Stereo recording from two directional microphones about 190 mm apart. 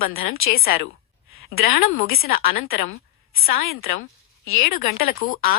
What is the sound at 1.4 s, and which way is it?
Speech, 50° left (ahead or behind).